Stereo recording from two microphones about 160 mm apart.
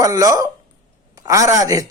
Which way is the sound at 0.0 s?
20° right (ahead or behind).